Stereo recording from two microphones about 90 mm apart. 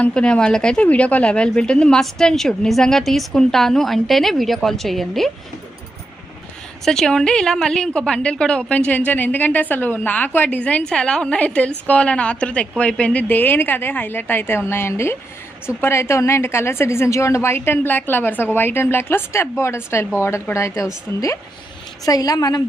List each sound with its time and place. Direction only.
0.0 s a woman's voice: 10° left (ahead or behind)
6.8 s a woman's voice: 5° left (ahead or behind)
13.2 s a woman's voice: 20° left (ahead or behind)
22.0 s a woman's voice: 45° left (ahead or behind)